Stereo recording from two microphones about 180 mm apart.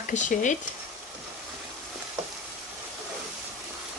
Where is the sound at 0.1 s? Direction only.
45° left (ahead or behind).